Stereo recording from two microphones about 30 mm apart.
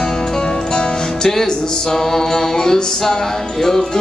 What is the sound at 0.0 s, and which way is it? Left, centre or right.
Music, centre.